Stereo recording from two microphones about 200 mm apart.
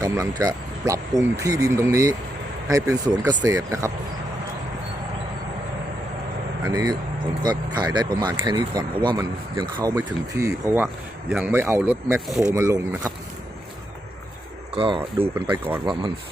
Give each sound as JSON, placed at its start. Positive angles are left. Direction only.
{"t": 0.0, "sound": "speech", "side_deg": -20}
{"t": 6.7, "sound": "speech", "side_deg": -20}
{"t": 14.8, "sound": "speech", "side_deg": -25}
{"t": 15.4, "sound": "speech", "side_deg": -10}
{"t": 15.9, "sound": "speech", "side_deg": -25}